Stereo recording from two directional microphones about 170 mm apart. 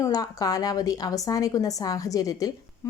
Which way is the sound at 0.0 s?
20° left (ahead or behind).